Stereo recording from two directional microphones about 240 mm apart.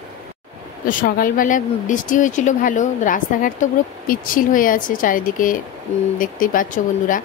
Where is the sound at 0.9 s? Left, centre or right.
Left.